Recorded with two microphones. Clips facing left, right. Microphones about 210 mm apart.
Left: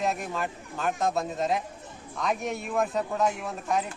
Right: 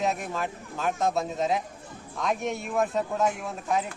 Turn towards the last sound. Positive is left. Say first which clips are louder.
# even
turn(degrees=0)  # may be behind; listen again after turning